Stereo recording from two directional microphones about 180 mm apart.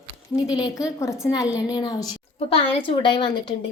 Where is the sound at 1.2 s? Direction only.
20° left (ahead or behind).